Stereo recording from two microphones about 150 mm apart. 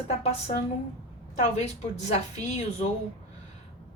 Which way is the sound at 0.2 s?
45° left (ahead or behind).